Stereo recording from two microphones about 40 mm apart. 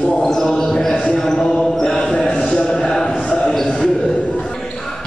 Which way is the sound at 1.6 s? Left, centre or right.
Centre.